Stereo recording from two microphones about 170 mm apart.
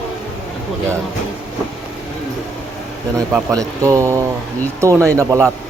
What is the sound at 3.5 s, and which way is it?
Speech, 20° right (ahead or behind).